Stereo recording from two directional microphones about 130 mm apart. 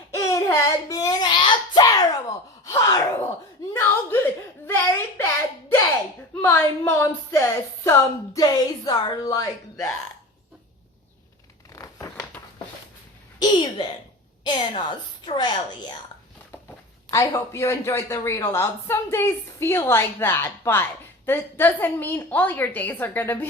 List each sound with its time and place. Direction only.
0.2 s a sound: 25° left (ahead or behind)
2.6 s gasp: 25° left (ahead or behind)
3.7 s a sound: 20° left (ahead or behind)
6.4 s a man's voice: 20° left (ahead or behind)
11.7 s crumpling: 25° left (ahead or behind)
13.4 s a woman's voice: 35° left (ahead or behind)
17.1 s a man's voice: 25° left (ahead or behind)